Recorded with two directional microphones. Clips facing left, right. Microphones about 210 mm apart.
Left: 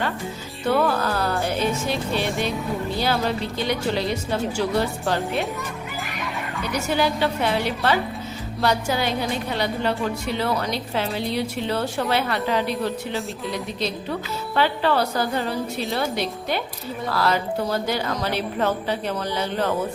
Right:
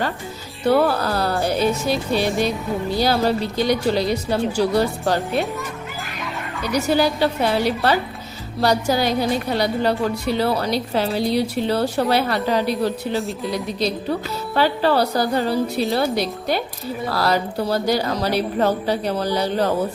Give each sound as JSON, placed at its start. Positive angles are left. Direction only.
{"t": 0.7, "sound": "music", "side_deg": -35}
{"t": 3.0, "sound": "a woman's voice", "side_deg": -40}
{"t": 6.7, "sound": "a woman's voice", "side_deg": -35}